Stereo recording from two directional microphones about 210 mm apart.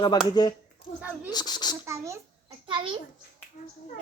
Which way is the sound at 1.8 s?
15° right (ahead or behind).